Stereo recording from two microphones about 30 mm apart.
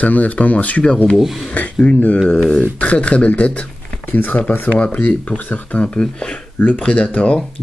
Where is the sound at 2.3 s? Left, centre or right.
Left.